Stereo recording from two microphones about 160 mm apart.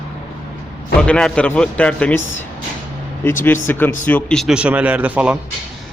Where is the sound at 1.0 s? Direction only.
5° left (ahead or behind).